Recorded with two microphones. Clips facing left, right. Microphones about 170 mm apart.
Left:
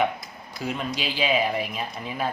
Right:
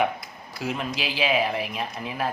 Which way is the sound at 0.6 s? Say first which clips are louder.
Even; 5° right (ahead or behind).